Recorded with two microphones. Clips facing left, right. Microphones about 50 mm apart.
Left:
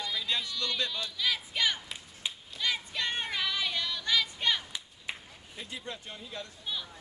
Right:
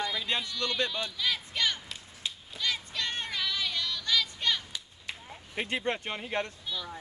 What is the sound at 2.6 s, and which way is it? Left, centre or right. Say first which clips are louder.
Music: left 1 dB; centre.